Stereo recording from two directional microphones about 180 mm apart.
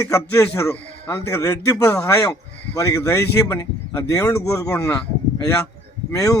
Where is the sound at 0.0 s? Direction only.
15° left (ahead or behind).